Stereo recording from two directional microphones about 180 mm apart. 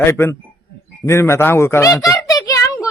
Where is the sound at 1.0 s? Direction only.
15° left (ahead or behind).